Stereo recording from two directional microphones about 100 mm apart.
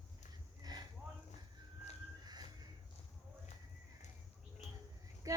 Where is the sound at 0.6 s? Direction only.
40° right (ahead or behind).